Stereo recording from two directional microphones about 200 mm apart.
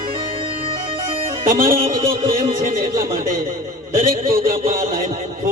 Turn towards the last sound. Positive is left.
turn(degrees=-45)  # may be behind; listen again after turning